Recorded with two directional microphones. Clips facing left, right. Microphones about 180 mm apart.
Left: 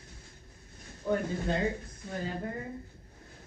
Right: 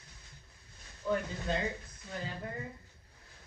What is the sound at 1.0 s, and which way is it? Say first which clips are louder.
Speech: left 3 dB; 40° left (ahead or behind).